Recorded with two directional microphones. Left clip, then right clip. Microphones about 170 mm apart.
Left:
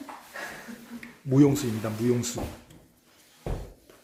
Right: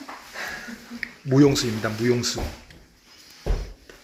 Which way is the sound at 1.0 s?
Centre (ahead or behind).